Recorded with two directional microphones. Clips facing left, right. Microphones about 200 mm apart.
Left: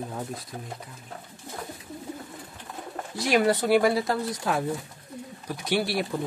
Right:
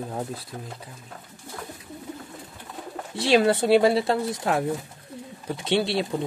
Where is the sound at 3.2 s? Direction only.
25° right (ahead or behind).